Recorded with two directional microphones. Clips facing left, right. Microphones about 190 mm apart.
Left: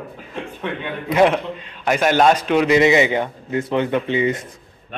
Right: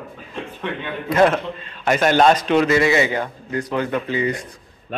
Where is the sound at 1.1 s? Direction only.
15° left (ahead or behind).